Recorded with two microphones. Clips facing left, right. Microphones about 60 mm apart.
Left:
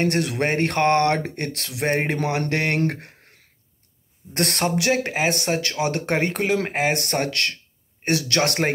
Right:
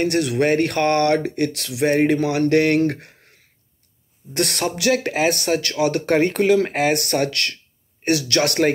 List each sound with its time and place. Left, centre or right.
0.0 s speech: left
4.3 s speech: left